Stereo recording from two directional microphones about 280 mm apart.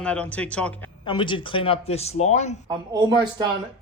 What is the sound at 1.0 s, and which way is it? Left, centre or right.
Speech, centre.